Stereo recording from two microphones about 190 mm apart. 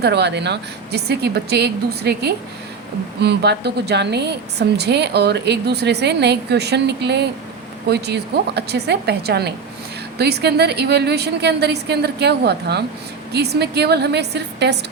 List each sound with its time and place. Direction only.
0.0 s a woman's voice: 60° right (ahead or behind)